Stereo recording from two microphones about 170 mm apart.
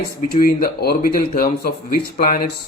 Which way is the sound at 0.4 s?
60° left (ahead or behind).